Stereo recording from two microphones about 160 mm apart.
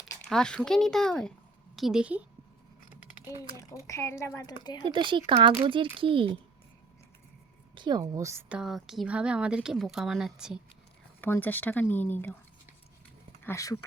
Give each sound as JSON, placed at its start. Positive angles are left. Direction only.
{"t": 0.3, "sound": "a woman's voice", "side_deg": 5}
{"t": 3.8, "sound": "a woman's voice", "side_deg": 20}
{"t": 4.9, "sound": "a child's voice", "side_deg": -30}
{"t": 7.8, "sound": "a woman's voice", "side_deg": -25}
{"t": 11.2, "sound": "speech", "side_deg": 10}
{"t": 13.4, "sound": "speech", "side_deg": 20}